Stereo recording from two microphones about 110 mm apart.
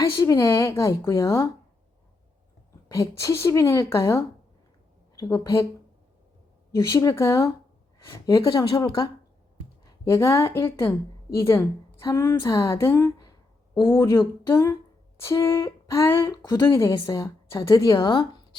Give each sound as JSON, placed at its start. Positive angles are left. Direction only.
{"t": 0.0, "sound": "a woman's voice", "side_deg": 25}
{"t": 2.9, "sound": "a woman's voice", "side_deg": 30}
{"t": 6.7, "sound": "a woman's voice", "side_deg": 30}
{"t": 16.9, "sound": "a woman's voice", "side_deg": 35}